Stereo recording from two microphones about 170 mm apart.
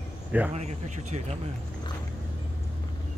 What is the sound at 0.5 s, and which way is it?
Speech, 40° right (ahead or behind).